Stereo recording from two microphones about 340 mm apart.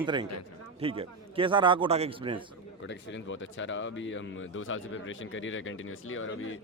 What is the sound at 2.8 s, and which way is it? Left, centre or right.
Speech, left.